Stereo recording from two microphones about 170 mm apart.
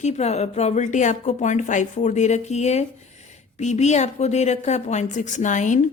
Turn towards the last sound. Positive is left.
turn(degrees=45)  # may be behind; listen again after turning